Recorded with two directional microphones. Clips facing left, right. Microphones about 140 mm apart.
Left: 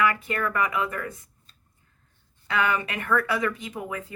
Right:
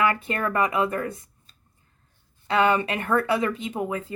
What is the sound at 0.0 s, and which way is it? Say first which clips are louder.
Speech: right 1 dB; 30° right (ahead or behind).